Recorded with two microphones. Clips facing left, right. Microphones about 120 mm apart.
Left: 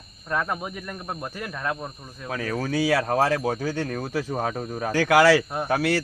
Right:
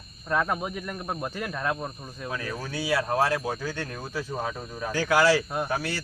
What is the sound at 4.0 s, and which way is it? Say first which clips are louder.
Speech: left 5 dB; 65° left (ahead or behind).